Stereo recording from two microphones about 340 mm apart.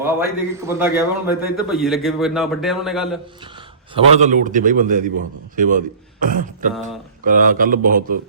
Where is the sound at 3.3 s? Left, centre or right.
Centre.